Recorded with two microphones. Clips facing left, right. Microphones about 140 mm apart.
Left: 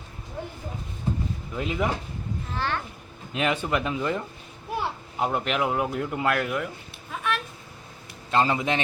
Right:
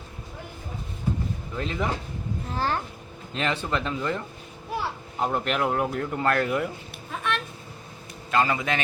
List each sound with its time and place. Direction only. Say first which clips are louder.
1.5 s speech: left 2 dB; 10° left (ahead or behind)
2.6 s a child's voice: right 2 dB; 40° right (ahead or behind)
3.3 s speech: left 2 dB; 10° left (ahead or behind)
5.2 s speech: even; 5° left (ahead or behind)
7.1 s a sound: even; 5° left (ahead or behind)
8.3 s a man's voice: left 1 dB; 25° left (ahead or behind)